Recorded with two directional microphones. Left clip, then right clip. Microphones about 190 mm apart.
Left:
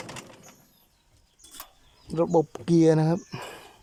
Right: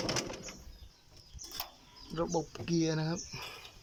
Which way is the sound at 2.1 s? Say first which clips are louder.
Left 12 dB; 25° left (ahead or behind).